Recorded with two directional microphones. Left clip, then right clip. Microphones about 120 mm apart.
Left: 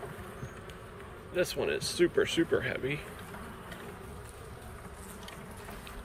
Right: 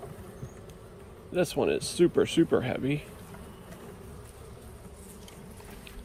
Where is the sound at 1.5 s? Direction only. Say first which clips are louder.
Right 4 dB; 25° right (ahead or behind).